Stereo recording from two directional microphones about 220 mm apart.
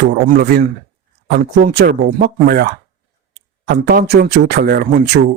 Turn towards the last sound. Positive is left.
turn(degrees=-45)  # may be behind; listen again after turning